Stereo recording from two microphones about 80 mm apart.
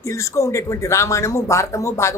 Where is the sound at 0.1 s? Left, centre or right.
Left.